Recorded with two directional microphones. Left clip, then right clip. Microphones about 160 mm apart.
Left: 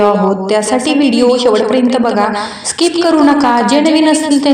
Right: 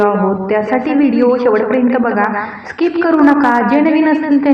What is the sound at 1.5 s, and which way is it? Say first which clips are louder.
Speech: left 2 dB; 40° left (ahead or behind).